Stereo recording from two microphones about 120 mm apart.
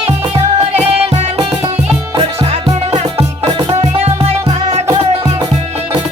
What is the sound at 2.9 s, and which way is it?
Music, 50° right (ahead or behind).